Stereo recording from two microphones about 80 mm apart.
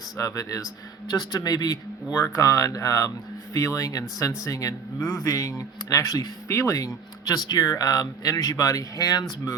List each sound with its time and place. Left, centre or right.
0.2 s speech: left
1.0 s speech: left
2.3 s speech: left
6.5 s speech: left